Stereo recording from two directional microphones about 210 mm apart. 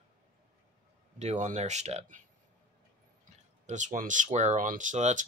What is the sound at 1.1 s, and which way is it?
Speech, 30° right (ahead or behind).